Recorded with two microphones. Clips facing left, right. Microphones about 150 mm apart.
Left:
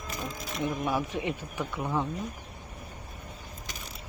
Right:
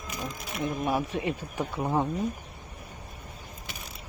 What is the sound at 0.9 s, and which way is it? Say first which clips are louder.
Speech: right 2 dB; 30° right (ahead or behind).